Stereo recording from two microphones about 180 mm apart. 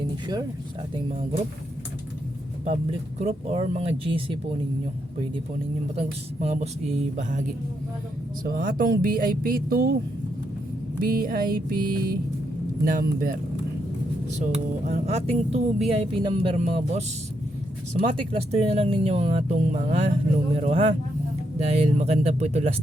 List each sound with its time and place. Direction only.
3.2 s speech: 35° right (ahead or behind)
6.0 s speech: 40° right (ahead or behind)
8.4 s speech: 50° right (ahead or behind)
11.0 s speech: 55° right (ahead or behind)
14.8 s speech: 40° right (ahead or behind)